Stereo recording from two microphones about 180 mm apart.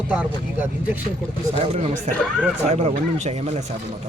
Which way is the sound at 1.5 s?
35° right (ahead or behind).